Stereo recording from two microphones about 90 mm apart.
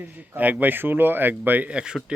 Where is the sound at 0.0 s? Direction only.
15° right (ahead or behind).